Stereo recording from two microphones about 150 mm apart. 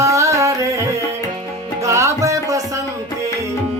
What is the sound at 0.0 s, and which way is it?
Music, 20° right (ahead or behind).